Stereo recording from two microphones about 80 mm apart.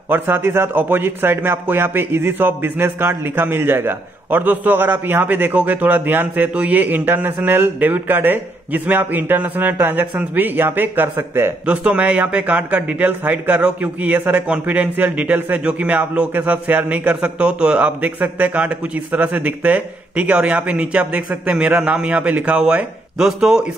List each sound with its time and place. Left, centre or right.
0.1 s a man's voice: right
11.6 s a man's voice: centre